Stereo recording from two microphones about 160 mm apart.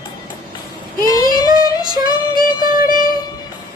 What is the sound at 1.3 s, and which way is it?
Female singing, 25° right (ahead or behind).